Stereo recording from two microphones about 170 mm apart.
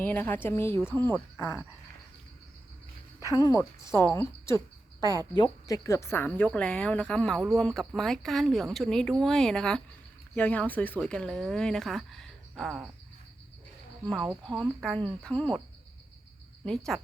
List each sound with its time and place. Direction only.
0.0 s a woman's voice: 10° left (ahead or behind)
3.2 s a woman's voice: 20° left (ahead or behind); by 12.8 s centre (ahead or behind)
14.3 s speech: 15° right (ahead or behind)
14.6 s speech: centre (ahead or behind)
16.6 s speech: 5° left (ahead or behind)